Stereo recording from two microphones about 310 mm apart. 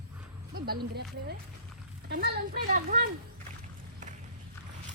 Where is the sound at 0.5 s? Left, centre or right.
Right.